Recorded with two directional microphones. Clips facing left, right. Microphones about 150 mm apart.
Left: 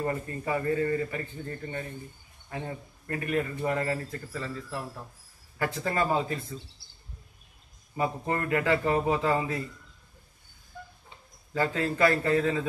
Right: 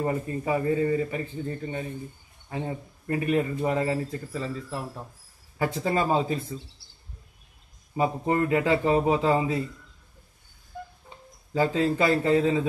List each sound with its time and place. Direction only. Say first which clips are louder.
0.0 s speech: right 3 dB; 15° right (ahead or behind)
7.9 s speech: right 4 dB; 20° right (ahead or behind)
11.5 s speech: right 5 dB; 15° right (ahead or behind)